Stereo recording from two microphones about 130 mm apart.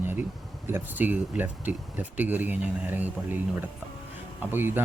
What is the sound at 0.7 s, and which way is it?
Speech, 15° right (ahead or behind).